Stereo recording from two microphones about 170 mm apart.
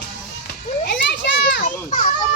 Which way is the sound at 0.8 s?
90° left.